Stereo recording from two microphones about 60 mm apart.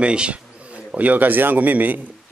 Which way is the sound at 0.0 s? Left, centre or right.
Centre.